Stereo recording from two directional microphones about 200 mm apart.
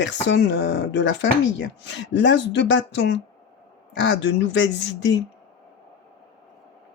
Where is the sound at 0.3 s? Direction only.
60° left (ahead or behind).